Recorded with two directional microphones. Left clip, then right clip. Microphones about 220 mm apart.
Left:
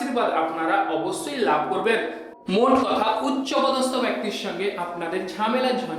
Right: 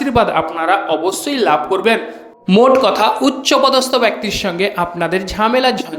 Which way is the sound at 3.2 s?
45° right (ahead or behind).